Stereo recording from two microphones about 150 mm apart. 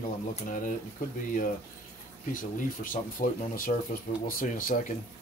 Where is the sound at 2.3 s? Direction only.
65° left (ahead or behind).